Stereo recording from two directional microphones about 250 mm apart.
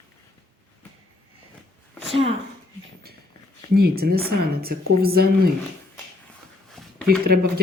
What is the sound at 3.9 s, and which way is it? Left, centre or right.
Speech, right.